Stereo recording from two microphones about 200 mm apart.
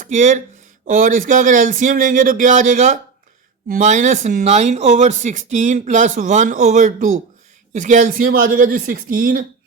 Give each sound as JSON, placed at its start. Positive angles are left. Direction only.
{"t": 0.0, "sound": "speech", "side_deg": -35}